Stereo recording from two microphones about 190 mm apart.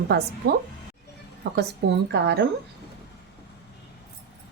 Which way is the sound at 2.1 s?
65° right (ahead or behind).